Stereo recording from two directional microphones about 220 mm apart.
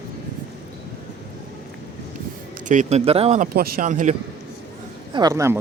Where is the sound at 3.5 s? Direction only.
45° right (ahead or behind).